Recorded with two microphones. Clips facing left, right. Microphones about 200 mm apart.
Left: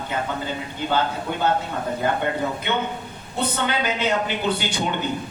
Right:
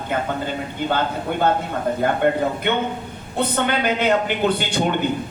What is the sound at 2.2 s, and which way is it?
Speech, 55° right (ahead or behind).